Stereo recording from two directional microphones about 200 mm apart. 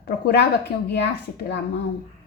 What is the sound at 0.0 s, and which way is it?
Speech, 55° left (ahead or behind).